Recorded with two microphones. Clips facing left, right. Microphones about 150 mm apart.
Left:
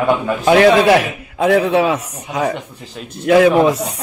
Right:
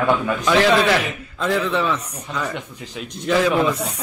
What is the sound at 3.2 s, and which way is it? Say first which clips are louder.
Speech: left 8 dB; 60° left (ahead or behind).